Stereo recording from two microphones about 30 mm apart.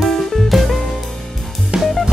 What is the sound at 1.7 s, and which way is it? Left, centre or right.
Music, right.